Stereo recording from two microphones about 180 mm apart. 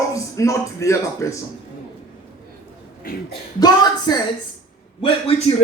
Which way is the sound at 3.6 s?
20° left (ahead or behind).